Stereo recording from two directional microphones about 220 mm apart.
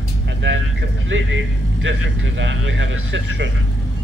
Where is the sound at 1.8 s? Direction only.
55° right (ahead or behind).